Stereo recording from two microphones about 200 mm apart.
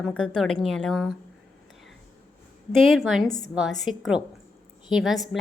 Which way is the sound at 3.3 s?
20° left (ahead or behind).